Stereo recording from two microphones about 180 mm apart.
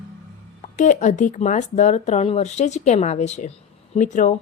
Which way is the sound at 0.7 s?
45° left (ahead or behind).